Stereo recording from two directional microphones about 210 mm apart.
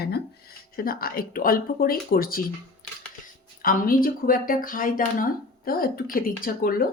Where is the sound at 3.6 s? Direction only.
45° left (ahead or behind).